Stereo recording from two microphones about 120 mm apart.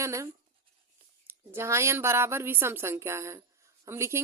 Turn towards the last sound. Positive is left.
turn(degrees=-20)  # may be behind; listen again after turning